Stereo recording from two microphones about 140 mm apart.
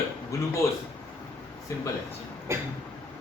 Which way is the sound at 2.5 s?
20° right (ahead or behind).